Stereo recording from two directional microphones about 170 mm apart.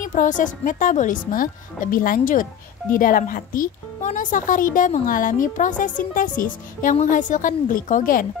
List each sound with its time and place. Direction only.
0.0 s speech: 50° left (ahead or behind)